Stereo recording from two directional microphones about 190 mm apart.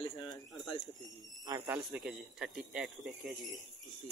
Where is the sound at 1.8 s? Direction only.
5° right (ahead or behind).